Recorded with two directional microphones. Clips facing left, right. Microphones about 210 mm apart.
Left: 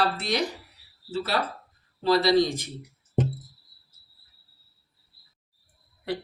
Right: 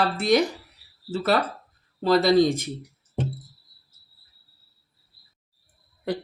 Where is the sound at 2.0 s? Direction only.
50° right (ahead or behind).